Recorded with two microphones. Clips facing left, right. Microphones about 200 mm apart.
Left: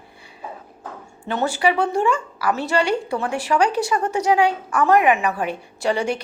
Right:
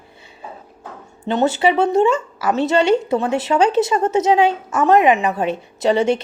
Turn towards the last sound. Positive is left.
turn(degrees=-20)  # may be behind; listen again after turning